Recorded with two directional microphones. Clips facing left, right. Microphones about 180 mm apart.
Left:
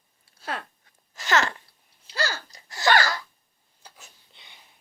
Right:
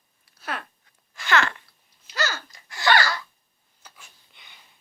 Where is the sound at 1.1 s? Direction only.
40° left (ahead or behind).